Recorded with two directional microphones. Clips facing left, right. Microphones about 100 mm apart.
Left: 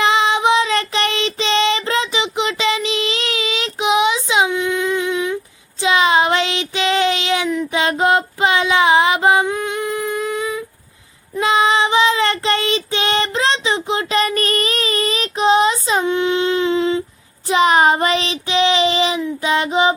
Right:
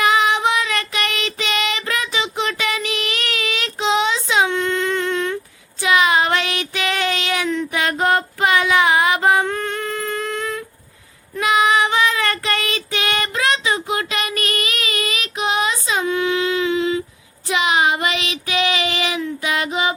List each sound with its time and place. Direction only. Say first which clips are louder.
0.0 s child singing: left 1 dB; 25° left (ahead or behind)
4.5 s a sound: left 1 dB; 10° left (ahead or behind)
5.8 s child singing: left 2 dB; 25° left (ahead or behind)
7.7 s female singing: left 3 dB; 20° left (ahead or behind)
11.3 s child singing: left 1 dB; 30° left (ahead or behind)